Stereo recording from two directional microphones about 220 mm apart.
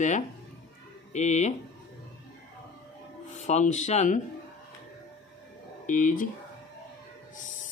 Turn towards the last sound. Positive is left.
turn(degrees=35)  # may be behind; listen again after turning